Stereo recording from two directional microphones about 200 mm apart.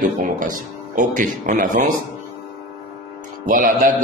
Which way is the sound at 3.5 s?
40° right (ahead or behind).